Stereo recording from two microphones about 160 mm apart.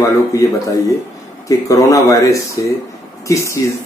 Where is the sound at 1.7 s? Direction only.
20° left (ahead or behind).